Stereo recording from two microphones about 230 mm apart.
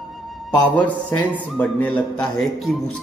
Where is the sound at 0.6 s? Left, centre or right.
Centre.